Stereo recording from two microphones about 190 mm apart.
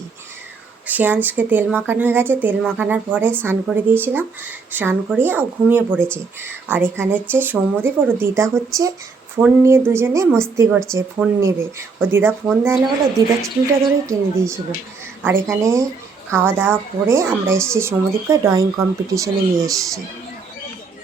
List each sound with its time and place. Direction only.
0.9 s speech: 10° right (ahead or behind)
14.1 s speech: 15° right (ahead or behind)